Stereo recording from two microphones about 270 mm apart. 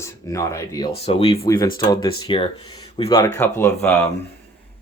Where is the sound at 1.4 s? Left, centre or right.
Centre.